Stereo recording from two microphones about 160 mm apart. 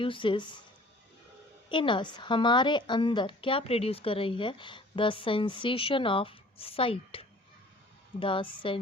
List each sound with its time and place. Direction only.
0.0 s a woman's voice: 30° left (ahead or behind)
1.7 s a woman's voice: 30° left (ahead or behind)